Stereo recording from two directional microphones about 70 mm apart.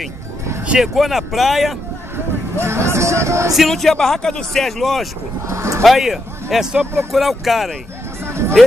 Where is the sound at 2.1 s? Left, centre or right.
Right.